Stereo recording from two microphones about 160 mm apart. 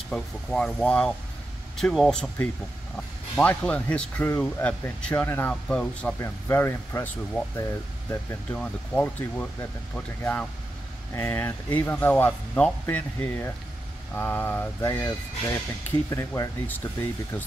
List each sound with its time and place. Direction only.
0.1 s speech: 5° left (ahead or behind)
3.3 s speech: 5° left (ahead or behind)